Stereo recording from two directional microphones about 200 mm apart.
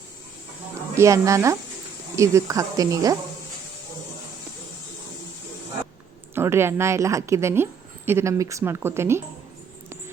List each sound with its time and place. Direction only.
0.9 s a woman's voice: 15° right (ahead or behind)
6.3 s a woman's voice: 10° right (ahead or behind)